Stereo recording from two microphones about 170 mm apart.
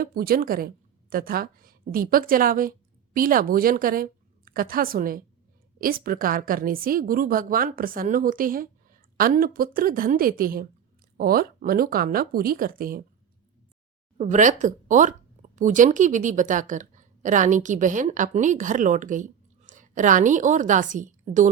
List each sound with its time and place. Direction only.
0.0 s a woman's voice: 60° right (ahead or behind)
14.2 s speech: 50° right (ahead or behind)